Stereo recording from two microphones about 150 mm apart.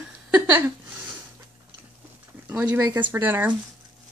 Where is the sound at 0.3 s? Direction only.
15° right (ahead or behind).